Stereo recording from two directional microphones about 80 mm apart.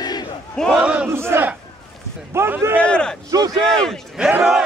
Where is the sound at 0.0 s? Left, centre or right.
Left.